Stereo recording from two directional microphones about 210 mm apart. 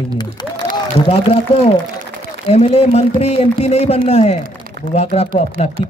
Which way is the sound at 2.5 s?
30° left (ahead or behind).